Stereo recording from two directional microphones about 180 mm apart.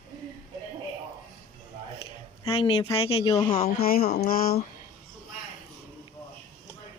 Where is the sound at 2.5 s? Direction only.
35° left (ahead or behind).